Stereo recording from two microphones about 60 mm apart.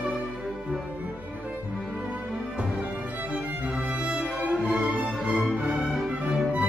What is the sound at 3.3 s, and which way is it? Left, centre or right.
Music, centre.